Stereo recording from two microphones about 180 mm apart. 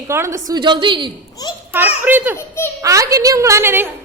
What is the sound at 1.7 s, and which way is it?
Speech, 10° right (ahead or behind).